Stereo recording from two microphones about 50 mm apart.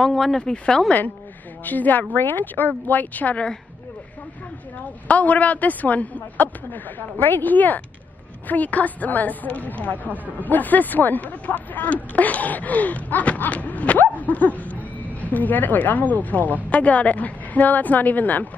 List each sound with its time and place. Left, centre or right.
0.0 s speech: centre
1.6 s speech: left
5.0 s speech: left